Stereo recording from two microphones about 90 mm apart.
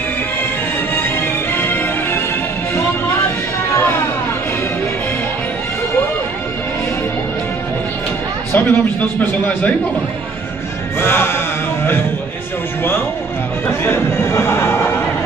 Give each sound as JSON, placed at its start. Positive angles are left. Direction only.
{"t": 1.6, "sound": "music", "side_deg": 25}
{"t": 8.5, "sound": "a man's voice", "side_deg": 25}
{"t": 11.0, "sound": "music", "side_deg": 25}
{"t": 13.7, "sound": "a sound", "side_deg": 30}